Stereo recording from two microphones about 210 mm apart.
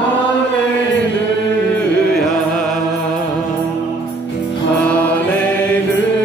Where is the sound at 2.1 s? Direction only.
Centre (ahead or behind).